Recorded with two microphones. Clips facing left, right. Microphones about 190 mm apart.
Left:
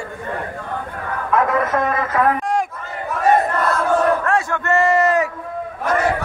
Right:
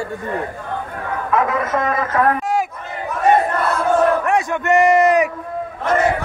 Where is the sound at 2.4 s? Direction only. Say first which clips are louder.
Right 1 dB; 5° right (ahead or behind).